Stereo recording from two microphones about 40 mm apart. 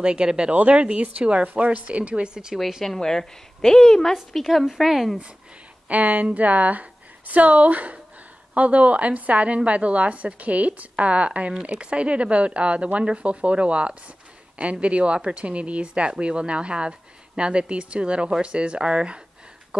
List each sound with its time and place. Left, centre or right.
0.0 s speech: right
0.5 s speech: right
1.5 s speech: right
2.8 s a woman's voice: centre
4.1 s a woman's voice: centre
5.9 s a woman's voice: right